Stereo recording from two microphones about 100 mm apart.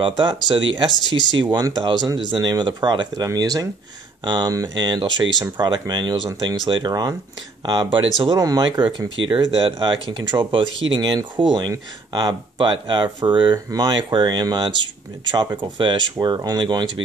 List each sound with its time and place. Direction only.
0.0 s speech: 50° right (ahead or behind)
3.3 s speech: 35° right (ahead or behind)
4.2 s speech: 50° right (ahead or behind)
8.4 s speech: 40° right (ahead or behind)
9.3 s speech: 55° right (ahead or behind)
16.3 s speech: 40° right (ahead or behind)
16.6 s speech: 50° right (ahead or behind)